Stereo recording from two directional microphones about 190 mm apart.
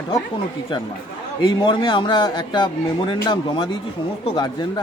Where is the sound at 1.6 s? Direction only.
25° left (ahead or behind).